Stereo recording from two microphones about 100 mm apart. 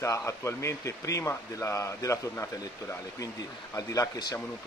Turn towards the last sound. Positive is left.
turn(degrees=35)  # may be behind; listen again after turning